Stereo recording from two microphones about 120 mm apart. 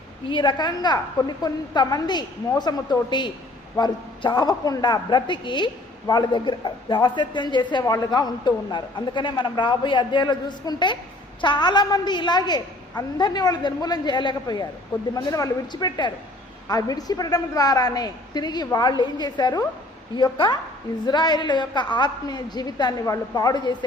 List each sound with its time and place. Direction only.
0.3 s a woman's voice: 40° left (ahead or behind)